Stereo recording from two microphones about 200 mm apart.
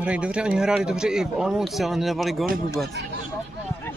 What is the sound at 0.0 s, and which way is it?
Speech, 5° right (ahead or behind).